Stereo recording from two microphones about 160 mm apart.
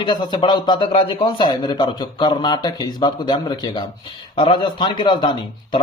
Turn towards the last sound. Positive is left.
turn(degrees=30)  # may be behind; listen again after turning